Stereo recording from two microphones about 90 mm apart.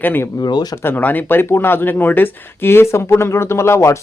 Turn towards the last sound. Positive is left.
turn(degrees=30)  # may be behind; listen again after turning